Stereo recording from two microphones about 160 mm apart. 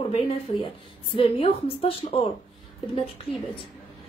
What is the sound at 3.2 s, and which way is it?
Speech, 35° left (ahead or behind).